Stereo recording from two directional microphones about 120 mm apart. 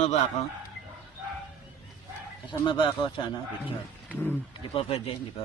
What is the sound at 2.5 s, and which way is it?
A man's voice, 40° left (ahead or behind).